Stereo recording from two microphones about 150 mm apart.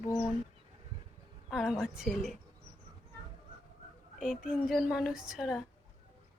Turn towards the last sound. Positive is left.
turn(degrees=0)  # may be behind; listen again after turning